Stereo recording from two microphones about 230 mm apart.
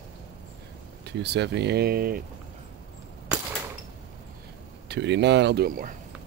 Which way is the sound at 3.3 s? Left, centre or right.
Centre.